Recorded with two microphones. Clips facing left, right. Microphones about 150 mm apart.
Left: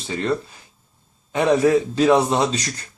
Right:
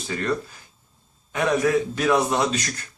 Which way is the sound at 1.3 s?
30° left (ahead or behind).